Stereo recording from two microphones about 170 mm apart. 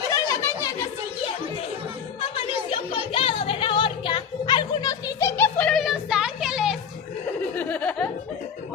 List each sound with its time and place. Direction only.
0.1 s a sound: 15° left (ahead or behind)
2.7 s music: 35° left (ahead or behind); by 6.8 s centre (ahead or behind)
7.5 s snicker: 10° left (ahead or behind)